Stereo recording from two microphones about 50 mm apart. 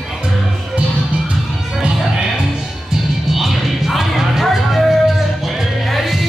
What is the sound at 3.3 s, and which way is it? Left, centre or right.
Music, centre.